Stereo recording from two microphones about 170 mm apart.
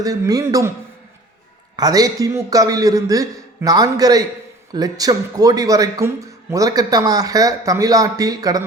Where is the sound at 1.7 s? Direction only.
20° right (ahead or behind).